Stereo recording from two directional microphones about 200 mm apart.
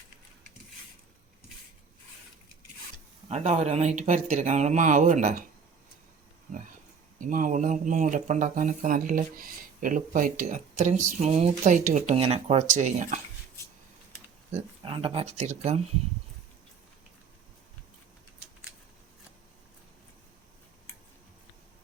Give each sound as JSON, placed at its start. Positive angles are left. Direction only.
{"t": 3.2, "sound": "speech", "side_deg": -35}
{"t": 7.2, "sound": "speech", "side_deg": -40}
{"t": 14.5, "sound": "speech", "side_deg": -25}